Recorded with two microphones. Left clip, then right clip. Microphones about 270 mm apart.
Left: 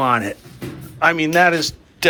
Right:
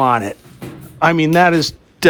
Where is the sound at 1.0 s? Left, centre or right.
Right.